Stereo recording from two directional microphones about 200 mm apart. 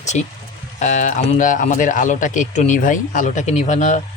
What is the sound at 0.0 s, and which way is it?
Speech, 35° left (ahead or behind).